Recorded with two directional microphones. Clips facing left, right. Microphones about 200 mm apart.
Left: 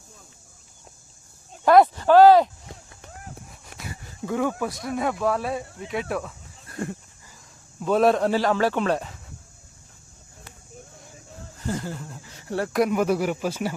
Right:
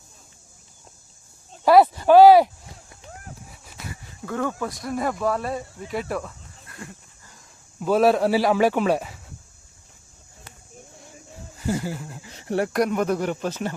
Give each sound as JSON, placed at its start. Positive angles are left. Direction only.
{"t": 1.6, "sound": "speech", "side_deg": -5}
{"t": 3.7, "sound": "livestock", "side_deg": 55}
{"t": 4.3, "sound": "speech", "side_deg": 10}
{"t": 4.7, "sound": "speech", "side_deg": 0}
{"t": 7.8, "sound": "speech", "side_deg": -5}
{"t": 11.6, "sound": "speech", "side_deg": -10}
{"t": 12.2, "sound": "a sound", "side_deg": -20}
{"t": 12.7, "sound": "speech", "side_deg": 5}